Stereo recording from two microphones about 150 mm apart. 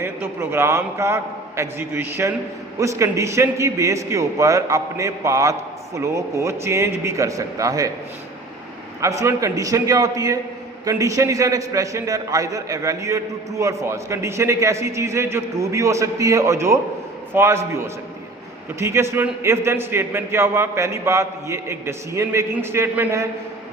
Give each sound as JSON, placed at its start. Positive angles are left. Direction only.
{"t": 0.0, "sound": "a man's voice", "side_deg": -15}
{"t": 9.0, "sound": "a man's voice", "side_deg": -20}